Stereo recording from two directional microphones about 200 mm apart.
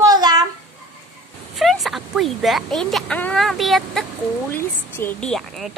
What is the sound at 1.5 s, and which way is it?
Speech, centre (ahead or behind).